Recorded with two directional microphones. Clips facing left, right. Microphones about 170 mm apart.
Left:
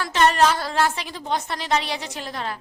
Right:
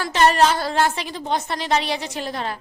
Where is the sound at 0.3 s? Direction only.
30° right (ahead or behind).